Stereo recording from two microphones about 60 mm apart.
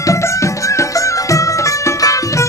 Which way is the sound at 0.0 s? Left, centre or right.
Left.